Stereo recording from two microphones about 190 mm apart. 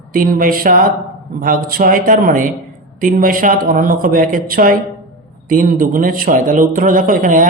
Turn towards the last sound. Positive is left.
turn(degrees=-45)  # may be behind; listen again after turning